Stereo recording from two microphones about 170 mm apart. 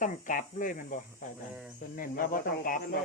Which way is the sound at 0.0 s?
50° left (ahead or behind).